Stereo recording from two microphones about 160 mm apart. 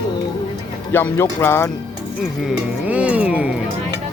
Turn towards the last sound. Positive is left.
turn(degrees=-10)  # may be behind; listen again after turning